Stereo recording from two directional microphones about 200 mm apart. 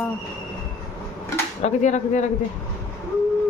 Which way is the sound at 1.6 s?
35° left (ahead or behind).